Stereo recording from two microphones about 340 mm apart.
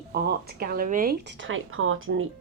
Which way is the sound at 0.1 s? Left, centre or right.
Right.